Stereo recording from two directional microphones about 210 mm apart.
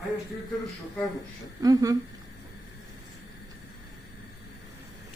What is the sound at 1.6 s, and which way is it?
Speech, 15° right (ahead or behind).